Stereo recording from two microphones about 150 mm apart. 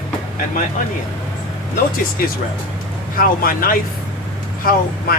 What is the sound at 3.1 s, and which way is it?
Speech, 75° left (ahead or behind).